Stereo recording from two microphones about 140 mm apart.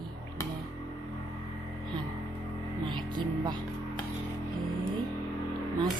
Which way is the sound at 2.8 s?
35° right (ahead or behind).